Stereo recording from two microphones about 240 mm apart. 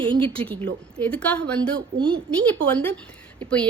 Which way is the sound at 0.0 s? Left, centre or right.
Right.